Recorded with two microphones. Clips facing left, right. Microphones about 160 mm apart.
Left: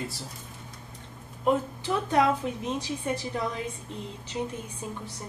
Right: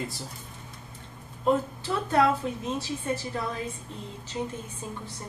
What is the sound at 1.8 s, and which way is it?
Speech, 15° left (ahead or behind).